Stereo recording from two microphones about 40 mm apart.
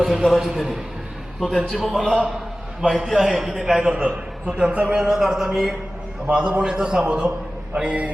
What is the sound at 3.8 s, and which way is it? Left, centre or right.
A man's voice, right.